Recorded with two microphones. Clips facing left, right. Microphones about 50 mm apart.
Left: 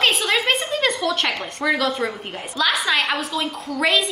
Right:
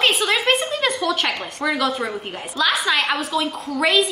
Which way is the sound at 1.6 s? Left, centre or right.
Centre.